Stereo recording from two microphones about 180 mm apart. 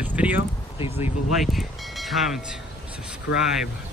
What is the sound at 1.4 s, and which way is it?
Speech, centre (ahead or behind).